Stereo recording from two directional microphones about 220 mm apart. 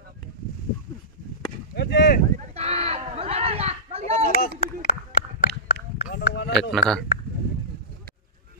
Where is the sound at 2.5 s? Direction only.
30° right (ahead or behind).